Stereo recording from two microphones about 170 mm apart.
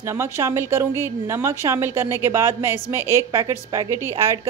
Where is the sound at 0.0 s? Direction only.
15° right (ahead or behind).